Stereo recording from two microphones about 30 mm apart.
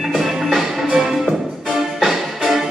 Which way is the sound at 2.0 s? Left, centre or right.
Centre.